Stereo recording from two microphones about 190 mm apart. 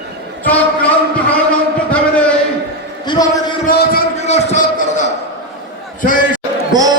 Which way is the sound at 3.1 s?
20° left (ahead or behind).